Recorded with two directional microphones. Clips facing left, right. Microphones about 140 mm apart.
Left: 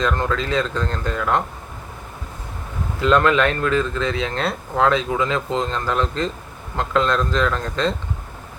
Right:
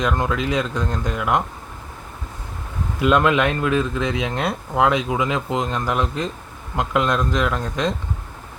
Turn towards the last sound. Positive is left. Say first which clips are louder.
# left 1 dB
turn(degrees=-15)  # may be behind; listen again after turning